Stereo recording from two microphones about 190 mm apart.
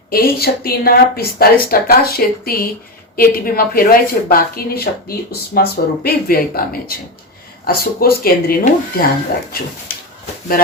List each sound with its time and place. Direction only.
0.1 s speech: 55° left (ahead or behind)